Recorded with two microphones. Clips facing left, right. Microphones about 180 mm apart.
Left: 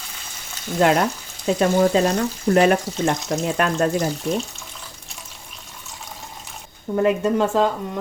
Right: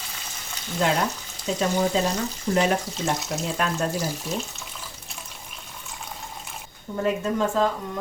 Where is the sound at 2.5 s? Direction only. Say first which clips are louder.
Left 6 dB; 65° left (ahead or behind).